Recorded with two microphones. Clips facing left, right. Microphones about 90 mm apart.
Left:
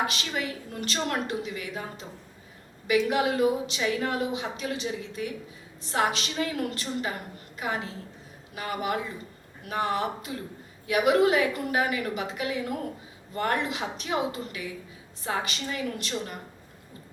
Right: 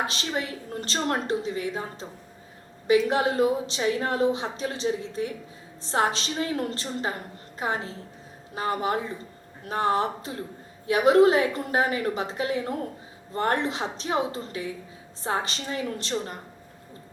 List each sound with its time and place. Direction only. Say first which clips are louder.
0.1 s a woman's voice: right 2 dB; 35° right (ahead or behind)